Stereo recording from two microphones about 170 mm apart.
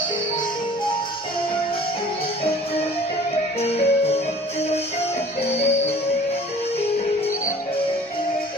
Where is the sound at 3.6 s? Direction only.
40° left (ahead or behind).